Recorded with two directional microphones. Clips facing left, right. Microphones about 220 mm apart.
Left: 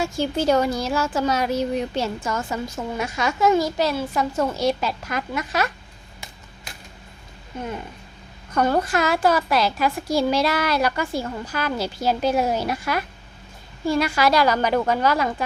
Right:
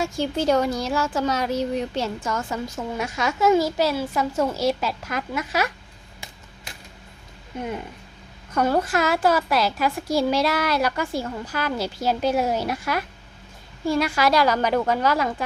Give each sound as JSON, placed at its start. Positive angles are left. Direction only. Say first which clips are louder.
{"t": 0.0, "sound": "a woman's voice", "louder": "left 1 dB", "side_deg": 5}
{"t": 7.5, "sound": "a woman's voice", "louder": "right 1 dB", "side_deg": -10}